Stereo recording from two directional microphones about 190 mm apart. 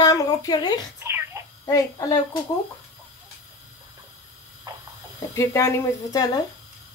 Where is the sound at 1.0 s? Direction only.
10° right (ahead or behind).